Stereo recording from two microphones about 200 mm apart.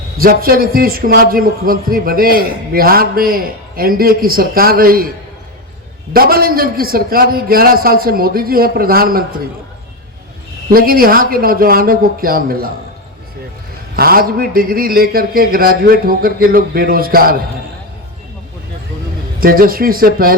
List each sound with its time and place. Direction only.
0.2 s a man's voice: 45° right (ahead or behind)
6.1 s a man's voice: 50° right (ahead or behind)
10.7 s a man's voice: 45° right (ahead or behind)
13.9 s a man's voice: 50° right (ahead or behind)
19.4 s a man's voice: 45° right (ahead or behind)